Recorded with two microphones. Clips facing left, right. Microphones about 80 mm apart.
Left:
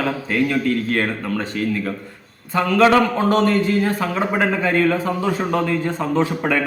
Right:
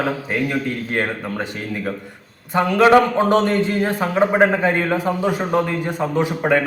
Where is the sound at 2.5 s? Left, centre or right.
Right.